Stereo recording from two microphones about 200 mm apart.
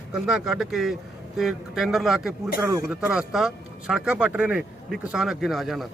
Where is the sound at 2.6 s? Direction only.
15° right (ahead or behind).